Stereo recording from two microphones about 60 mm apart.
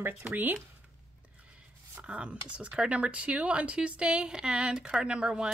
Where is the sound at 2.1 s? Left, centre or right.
Centre.